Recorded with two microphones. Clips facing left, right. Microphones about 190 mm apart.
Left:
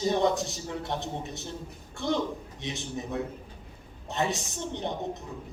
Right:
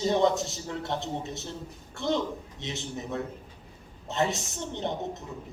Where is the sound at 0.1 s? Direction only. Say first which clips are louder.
Right 1 dB; 20° right (ahead or behind).